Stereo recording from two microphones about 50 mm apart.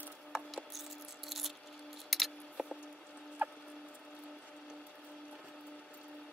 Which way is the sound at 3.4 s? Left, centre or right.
Right.